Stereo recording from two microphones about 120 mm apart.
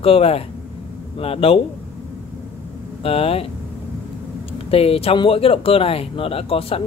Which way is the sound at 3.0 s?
55° left (ahead or behind).